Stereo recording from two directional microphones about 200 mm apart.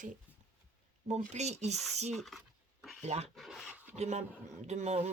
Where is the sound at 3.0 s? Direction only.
35° right (ahead or behind).